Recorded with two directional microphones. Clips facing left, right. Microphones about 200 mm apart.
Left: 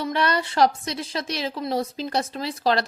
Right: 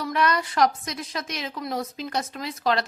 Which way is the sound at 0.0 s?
30° left (ahead or behind).